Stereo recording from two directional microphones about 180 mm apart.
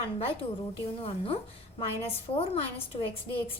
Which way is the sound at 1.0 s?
30° left (ahead or behind).